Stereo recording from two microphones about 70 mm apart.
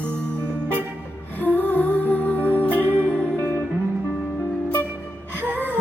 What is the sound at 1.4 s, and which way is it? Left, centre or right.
Music, left.